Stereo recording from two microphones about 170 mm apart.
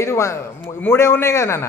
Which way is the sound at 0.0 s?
15° left (ahead or behind).